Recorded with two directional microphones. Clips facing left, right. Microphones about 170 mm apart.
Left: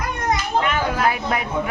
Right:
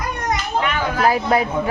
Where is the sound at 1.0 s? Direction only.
35° right (ahead or behind).